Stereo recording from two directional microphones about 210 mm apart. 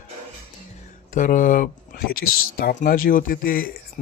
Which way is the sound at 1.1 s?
40° left (ahead or behind).